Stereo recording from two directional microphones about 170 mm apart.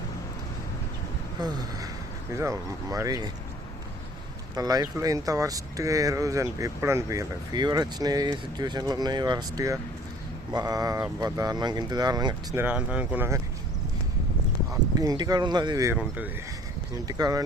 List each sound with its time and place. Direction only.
1.4 s speech: 25° right (ahead or behind)
4.5 s speech: 20° right (ahead or behind)
12.6 s speech: 5° right (ahead or behind)
14.7 s speech: 20° right (ahead or behind)
16.0 s speech: 10° right (ahead or behind)
17.1 s speech: 20° right (ahead or behind)